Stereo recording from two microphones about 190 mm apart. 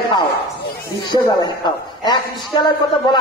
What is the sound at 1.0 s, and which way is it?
Speech, 20° left (ahead or behind).